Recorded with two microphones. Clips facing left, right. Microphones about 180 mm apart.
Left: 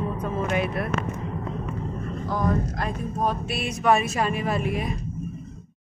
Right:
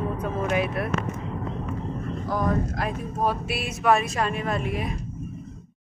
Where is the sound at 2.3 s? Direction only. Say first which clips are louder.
Even; centre (ahead or behind).